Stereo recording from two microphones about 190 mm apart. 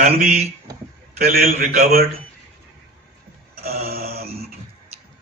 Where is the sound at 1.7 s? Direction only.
50° right (ahead or behind).